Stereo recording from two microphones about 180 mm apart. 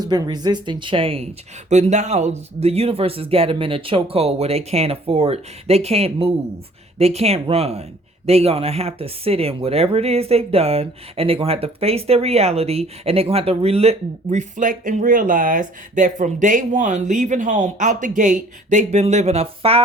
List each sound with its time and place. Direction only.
0.0 s speech: 25° right (ahead or behind)